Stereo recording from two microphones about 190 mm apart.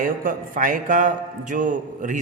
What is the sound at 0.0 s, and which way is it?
A man's voice, 45° right (ahead or behind).